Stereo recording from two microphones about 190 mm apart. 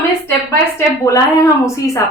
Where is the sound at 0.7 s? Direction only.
15° left (ahead or behind).